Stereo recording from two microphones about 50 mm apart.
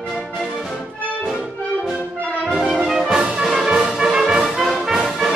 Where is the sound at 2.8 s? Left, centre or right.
Centre.